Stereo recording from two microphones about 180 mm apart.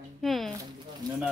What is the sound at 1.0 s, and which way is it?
Speech, 25° right (ahead or behind).